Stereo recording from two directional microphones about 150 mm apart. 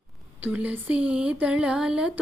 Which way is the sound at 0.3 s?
10° right (ahead or behind).